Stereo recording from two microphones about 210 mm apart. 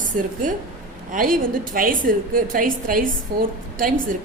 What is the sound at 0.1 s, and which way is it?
A woman's voice, 40° right (ahead or behind).